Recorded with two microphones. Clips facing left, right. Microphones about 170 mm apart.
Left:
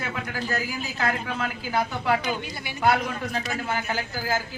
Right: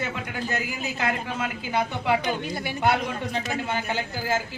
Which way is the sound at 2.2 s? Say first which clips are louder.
Right 2 dB; 50° right (ahead or behind).